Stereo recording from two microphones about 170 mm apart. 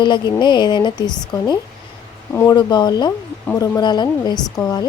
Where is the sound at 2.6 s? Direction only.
25° left (ahead or behind).